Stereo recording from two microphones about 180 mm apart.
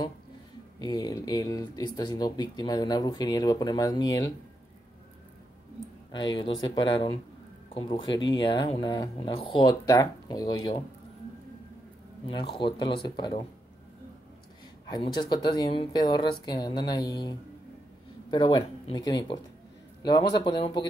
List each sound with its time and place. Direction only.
0.7 s speech: 20° left (ahead or behind)
6.1 s speech: 25° left (ahead or behind)
12.5 s speech: 25° left (ahead or behind)
14.9 s speech: 25° left (ahead or behind)